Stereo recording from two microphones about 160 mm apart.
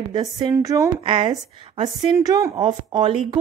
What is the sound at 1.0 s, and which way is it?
A woman's voice, 30° right (ahead or behind).